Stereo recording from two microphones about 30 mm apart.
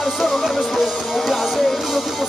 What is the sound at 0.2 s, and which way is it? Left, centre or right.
Music, centre.